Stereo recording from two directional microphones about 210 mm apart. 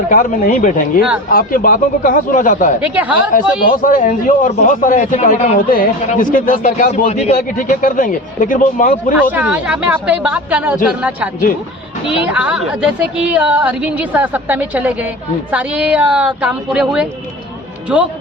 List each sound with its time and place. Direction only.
0.1 s a man's voice: 40° left (ahead or behind)
2.8 s a woman's voice: 5° right (ahead or behind)
3.6 s a man's voice: 40° left (ahead or behind)
9.3 s a woman's voice: 5° right (ahead or behind)
12.1 s a woman's voice: 5° right (ahead or behind)